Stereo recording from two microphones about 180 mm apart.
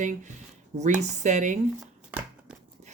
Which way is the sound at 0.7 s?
40° right (ahead or behind).